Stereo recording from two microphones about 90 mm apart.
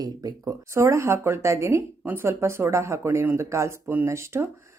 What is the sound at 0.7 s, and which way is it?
Speech, 30° right (ahead or behind).